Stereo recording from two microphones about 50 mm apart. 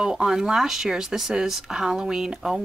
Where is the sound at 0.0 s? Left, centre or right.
Centre.